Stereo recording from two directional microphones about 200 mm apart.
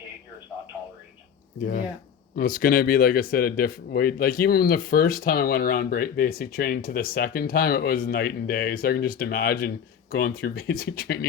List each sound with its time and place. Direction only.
2.3 s speech: 45° left (ahead or behind)